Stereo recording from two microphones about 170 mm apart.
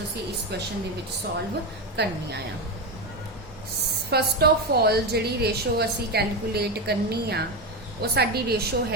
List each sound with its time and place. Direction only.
2.0 s a woman's voice: 75° right (ahead or behind)
4.1 s a woman's voice: 70° right (ahead or behind)